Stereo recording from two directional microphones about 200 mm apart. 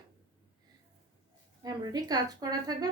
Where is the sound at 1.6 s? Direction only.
20° right (ahead or behind).